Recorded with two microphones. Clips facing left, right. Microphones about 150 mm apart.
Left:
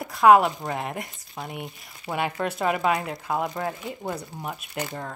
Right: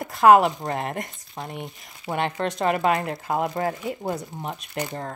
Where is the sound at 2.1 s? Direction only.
10° right (ahead or behind).